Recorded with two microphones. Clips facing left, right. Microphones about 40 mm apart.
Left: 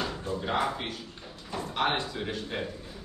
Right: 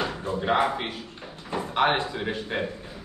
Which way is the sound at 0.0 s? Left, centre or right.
Right.